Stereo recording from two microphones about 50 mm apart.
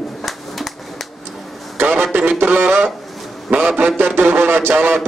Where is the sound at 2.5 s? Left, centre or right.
Right.